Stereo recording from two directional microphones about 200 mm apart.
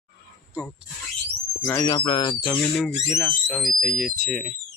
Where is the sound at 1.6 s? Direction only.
15° left (ahead or behind).